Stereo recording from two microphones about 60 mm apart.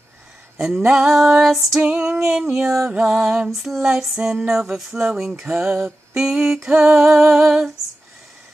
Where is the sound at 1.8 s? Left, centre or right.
Centre.